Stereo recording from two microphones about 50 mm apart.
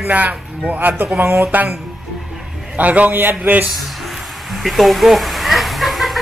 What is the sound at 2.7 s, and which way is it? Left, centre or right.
Speech, right.